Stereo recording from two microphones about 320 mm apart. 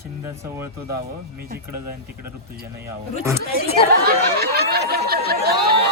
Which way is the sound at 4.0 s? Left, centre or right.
Right.